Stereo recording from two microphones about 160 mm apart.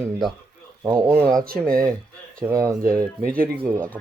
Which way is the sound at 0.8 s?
20° right (ahead or behind).